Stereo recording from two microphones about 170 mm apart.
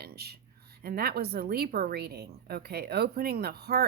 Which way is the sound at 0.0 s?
70° right (ahead or behind).